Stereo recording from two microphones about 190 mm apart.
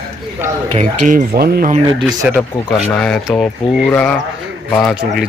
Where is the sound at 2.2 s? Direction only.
5° right (ahead or behind).